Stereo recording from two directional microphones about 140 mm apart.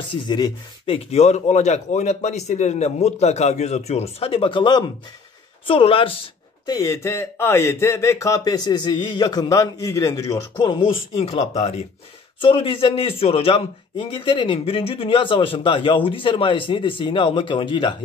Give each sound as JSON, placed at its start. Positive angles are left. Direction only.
{"t": 0.3, "sound": "a man's voice", "side_deg": 35}
{"t": 6.6, "sound": "speech", "side_deg": 25}
{"t": 12.4, "sound": "a man's voice", "side_deg": 40}